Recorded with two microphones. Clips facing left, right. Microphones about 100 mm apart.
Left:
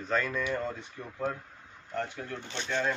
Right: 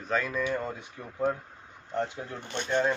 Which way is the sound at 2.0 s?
20° right (ahead or behind).